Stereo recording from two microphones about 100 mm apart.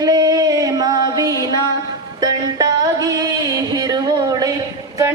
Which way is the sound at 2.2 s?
35° right (ahead or behind).